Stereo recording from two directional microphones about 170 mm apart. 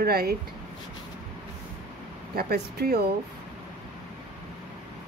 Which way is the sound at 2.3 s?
65° right (ahead or behind).